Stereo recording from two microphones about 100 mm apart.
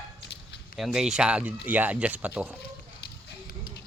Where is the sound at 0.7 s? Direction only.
5° right (ahead or behind).